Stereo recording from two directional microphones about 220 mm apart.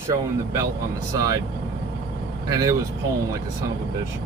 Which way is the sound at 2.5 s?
15° right (ahead or behind).